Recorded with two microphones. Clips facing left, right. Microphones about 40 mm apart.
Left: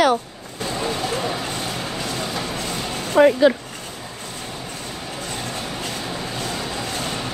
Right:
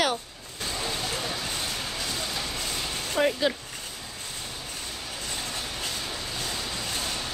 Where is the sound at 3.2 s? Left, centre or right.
Left.